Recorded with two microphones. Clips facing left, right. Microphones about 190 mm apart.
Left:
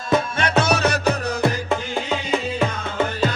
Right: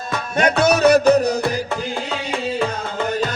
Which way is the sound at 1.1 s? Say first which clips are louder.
Right 5 dB; 35° right (ahead or behind).